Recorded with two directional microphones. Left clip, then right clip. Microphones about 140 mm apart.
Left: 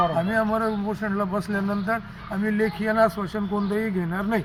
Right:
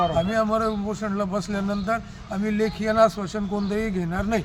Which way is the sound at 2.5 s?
35° right (ahead or behind).